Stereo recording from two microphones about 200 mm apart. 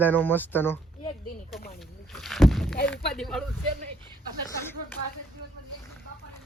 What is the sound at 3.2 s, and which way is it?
Speech, centre (ahead or behind).